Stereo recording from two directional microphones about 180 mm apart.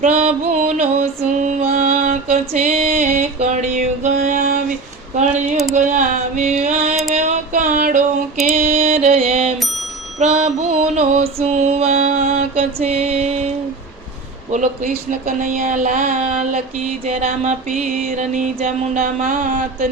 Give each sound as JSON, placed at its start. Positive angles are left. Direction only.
{"t": 0.0, "sound": "music", "side_deg": -40}
{"t": 2.5, "sound": "music", "side_deg": -35}
{"t": 5.3, "sound": "a sound", "side_deg": 0}
{"t": 5.7, "sound": "music", "side_deg": -45}
{"t": 7.1, "sound": "a sound", "side_deg": -40}
{"t": 8.5, "sound": "music", "side_deg": -35}
{"t": 14.5, "sound": "music", "side_deg": -40}